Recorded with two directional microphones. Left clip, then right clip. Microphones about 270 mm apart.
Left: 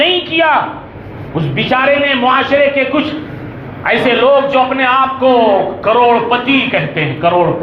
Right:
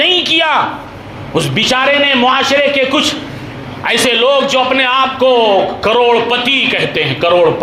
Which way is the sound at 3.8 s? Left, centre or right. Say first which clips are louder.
Left 1 dB; right.